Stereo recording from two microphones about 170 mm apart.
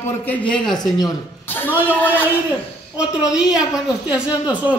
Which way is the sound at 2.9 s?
5° right (ahead or behind).